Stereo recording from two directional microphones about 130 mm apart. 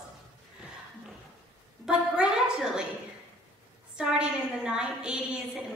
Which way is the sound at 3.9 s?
5° right (ahead or behind).